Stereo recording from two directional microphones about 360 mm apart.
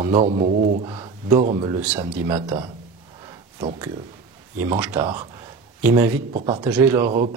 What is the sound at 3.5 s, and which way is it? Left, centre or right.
Speech, centre.